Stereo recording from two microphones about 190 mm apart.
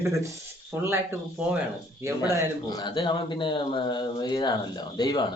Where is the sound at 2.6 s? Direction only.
20° left (ahead or behind).